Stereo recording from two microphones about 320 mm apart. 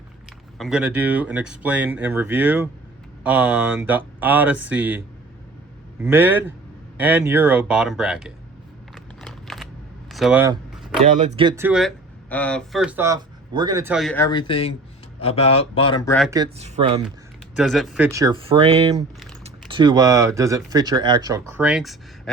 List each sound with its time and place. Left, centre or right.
0.6 s speech: centre
9.2 s computer keyboard: centre
10.1 s a sound: centre
11.0 s speech: right; by 16.3 s centre
16.3 s speech: centre
17.6 s speech: centre